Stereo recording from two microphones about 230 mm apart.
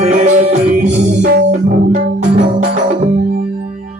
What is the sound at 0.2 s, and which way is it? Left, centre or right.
Music, right.